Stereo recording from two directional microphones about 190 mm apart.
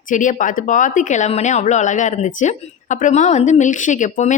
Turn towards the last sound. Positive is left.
turn(degrees=40)  # may be behind; listen again after turning